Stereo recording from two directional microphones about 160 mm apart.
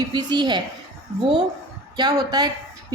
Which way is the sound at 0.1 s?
30° right (ahead or behind).